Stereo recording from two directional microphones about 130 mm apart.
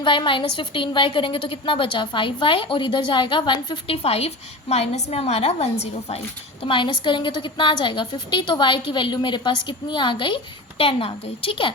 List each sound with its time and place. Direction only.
0.0 s a woman's voice: 40° left (ahead or behind)
6.7 s a woman's voice: 40° left (ahead or behind)